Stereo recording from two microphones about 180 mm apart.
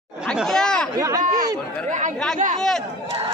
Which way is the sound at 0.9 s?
20° right (ahead or behind).